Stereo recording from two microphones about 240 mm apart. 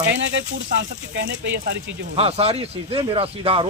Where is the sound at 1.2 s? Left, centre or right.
Right.